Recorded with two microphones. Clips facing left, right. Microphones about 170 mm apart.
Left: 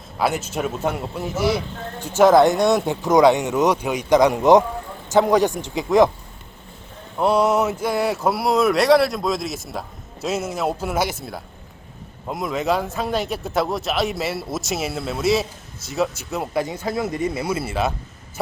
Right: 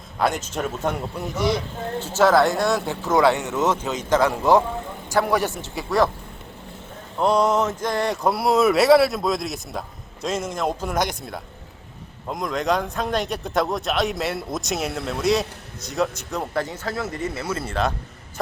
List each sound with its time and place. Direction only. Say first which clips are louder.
0.2 s a man's voice: left 1 dB; 5° left (ahead or behind)
7.2 s speech: left 1 dB; 5° left (ahead or behind)